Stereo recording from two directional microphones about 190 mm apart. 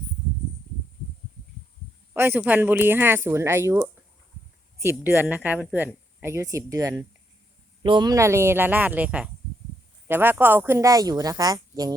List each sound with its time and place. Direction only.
2.1 s speech: 10° right (ahead or behind)